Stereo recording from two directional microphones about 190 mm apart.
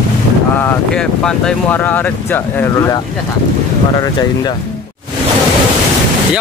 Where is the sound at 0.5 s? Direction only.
5° left (ahead or behind).